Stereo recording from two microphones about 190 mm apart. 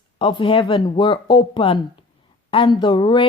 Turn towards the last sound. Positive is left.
turn(degrees=25)  # may be behind; listen again after turning